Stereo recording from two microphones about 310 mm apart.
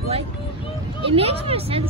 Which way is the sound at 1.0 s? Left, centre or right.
Centre.